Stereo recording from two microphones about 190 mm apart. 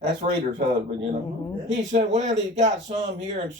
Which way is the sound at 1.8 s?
40° right (ahead or behind).